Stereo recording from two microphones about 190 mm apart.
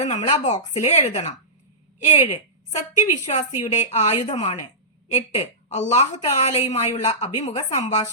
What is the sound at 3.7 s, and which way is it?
Speech, 35° left (ahead or behind).